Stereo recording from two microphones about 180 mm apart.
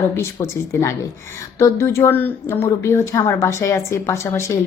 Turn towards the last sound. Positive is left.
turn(degrees=15)  # may be behind; listen again after turning